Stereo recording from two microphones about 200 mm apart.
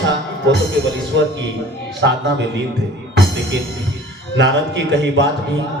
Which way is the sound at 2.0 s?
60° right (ahead or behind).